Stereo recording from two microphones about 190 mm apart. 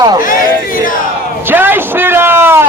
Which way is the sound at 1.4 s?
10° right (ahead or behind).